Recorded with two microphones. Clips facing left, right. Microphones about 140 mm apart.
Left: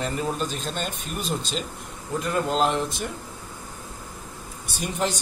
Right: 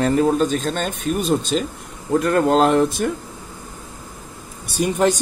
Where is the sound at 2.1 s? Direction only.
70° right (ahead or behind).